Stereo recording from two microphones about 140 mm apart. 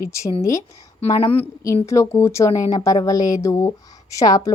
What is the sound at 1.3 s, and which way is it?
Speech, 20° left (ahead or behind).